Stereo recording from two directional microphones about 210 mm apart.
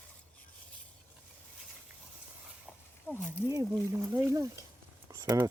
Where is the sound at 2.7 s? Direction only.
5° right (ahead or behind).